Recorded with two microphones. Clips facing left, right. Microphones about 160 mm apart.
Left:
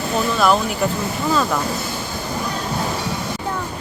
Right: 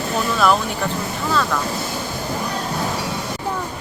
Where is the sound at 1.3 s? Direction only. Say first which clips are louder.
Left 2 dB; 15° left (ahead or behind).